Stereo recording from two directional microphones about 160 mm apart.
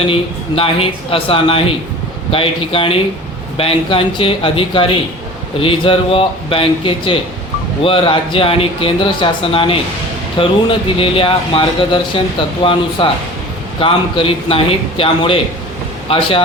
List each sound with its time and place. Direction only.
0.1 s speech: 35° left (ahead or behind)